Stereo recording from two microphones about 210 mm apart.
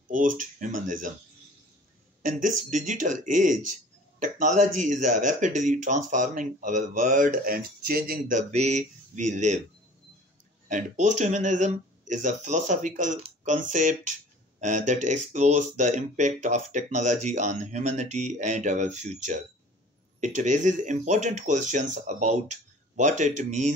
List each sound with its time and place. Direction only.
0.1 s speech: 40° right (ahead or behind)
2.2 s speech: 40° right (ahead or behind)
10.7 s speech: 35° right (ahead or behind)